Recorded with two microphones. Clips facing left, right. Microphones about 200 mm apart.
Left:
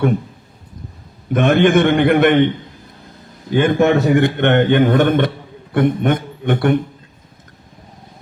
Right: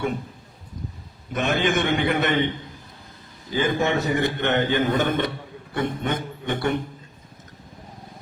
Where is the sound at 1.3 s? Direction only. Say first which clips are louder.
Left 10 dB; 55° left (ahead or behind).